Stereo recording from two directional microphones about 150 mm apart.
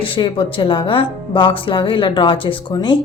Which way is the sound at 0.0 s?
35° left (ahead or behind).